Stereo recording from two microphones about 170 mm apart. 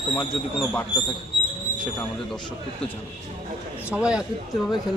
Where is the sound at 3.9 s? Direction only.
5° right (ahead or behind).